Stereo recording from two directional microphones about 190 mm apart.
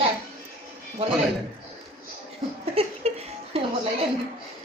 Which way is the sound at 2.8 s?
30° right (ahead or behind).